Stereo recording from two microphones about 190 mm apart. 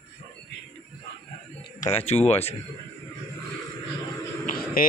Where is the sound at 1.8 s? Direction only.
35° left (ahead or behind).